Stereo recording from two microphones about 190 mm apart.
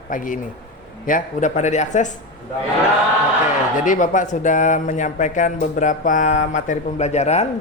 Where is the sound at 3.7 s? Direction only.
40° left (ahead or behind).